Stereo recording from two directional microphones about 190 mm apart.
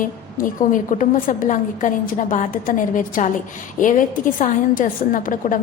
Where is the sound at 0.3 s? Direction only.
45° left (ahead or behind).